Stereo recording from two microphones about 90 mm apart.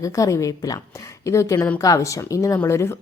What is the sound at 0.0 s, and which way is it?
A woman's voice, 35° left (ahead or behind).